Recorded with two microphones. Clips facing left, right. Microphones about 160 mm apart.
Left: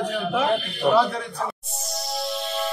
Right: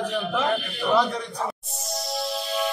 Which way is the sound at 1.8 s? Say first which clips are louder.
Even; centre (ahead or behind).